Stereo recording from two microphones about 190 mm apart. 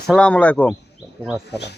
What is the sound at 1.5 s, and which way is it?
Speech, 60° left (ahead or behind).